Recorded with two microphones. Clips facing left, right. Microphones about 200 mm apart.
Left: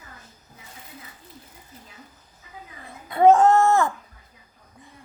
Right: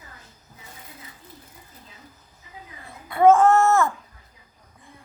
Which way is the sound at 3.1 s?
20° left (ahead or behind).